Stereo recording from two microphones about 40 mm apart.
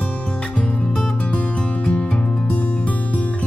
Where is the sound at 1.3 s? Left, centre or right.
Left.